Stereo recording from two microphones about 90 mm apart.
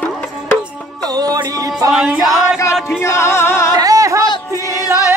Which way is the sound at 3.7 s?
40° right (ahead or behind).